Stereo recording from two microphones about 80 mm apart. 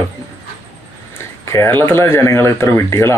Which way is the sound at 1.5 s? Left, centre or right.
Left.